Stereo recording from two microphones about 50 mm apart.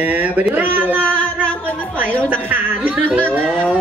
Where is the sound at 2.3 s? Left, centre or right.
Right.